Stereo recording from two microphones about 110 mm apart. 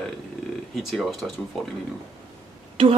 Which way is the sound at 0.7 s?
Centre (ahead or behind).